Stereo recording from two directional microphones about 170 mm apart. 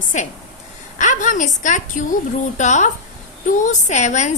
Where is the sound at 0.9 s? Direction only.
50° left (ahead or behind).